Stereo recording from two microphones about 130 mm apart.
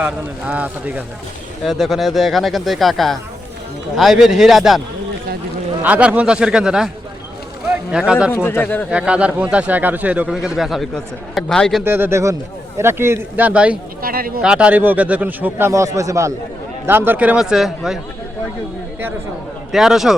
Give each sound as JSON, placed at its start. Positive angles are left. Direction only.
{"t": 0.0, "sound": "speech", "side_deg": -10}
{"t": 1.6, "sound": "speech", "side_deg": 0}
{"t": 5.8, "sound": "speech", "side_deg": -10}
{"t": 8.4, "sound": "speech", "side_deg": 15}
{"t": 8.9, "sound": "speech", "side_deg": -10}
{"t": 11.9, "sound": "speech", "side_deg": -15}
{"t": 19.7, "sound": "speech", "side_deg": -5}